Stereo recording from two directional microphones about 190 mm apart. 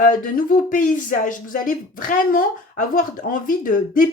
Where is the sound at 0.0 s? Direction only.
45° left (ahead or behind).